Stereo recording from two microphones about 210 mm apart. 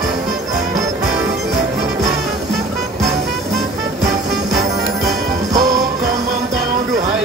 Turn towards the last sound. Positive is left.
turn(degrees=-15)  # may be behind; listen again after turning